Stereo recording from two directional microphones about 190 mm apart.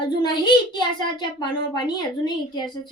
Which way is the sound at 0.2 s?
25° left (ahead or behind).